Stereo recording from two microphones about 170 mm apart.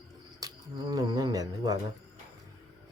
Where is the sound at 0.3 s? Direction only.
20° right (ahead or behind).